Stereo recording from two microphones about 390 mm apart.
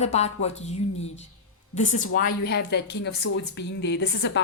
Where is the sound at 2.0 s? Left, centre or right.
Left.